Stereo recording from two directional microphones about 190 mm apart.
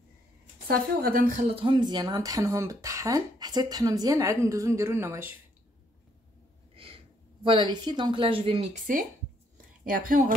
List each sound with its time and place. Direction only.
0.7 s a woman's voice: 50° right (ahead or behind)
1.5 s speech: 25° right (ahead or behind)
6.7 s a sound: 30° right (ahead or behind)
7.4 s a woman's voice: 25° right (ahead or behind)
9.8 s a woman's voice: 45° right (ahead or behind)